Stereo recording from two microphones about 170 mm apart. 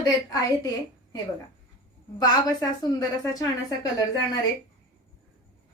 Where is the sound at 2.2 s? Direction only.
20° left (ahead or behind).